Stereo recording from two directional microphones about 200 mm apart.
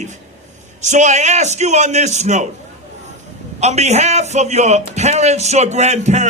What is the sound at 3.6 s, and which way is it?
A man's voice, 35° right (ahead or behind).